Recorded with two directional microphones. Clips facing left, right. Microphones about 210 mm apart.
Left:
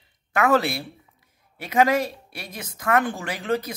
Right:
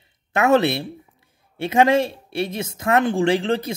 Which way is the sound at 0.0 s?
25° right (ahead or behind).